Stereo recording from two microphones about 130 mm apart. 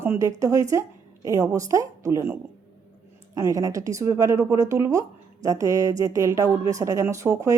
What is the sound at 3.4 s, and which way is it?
A woman's voice, 25° right (ahead or behind).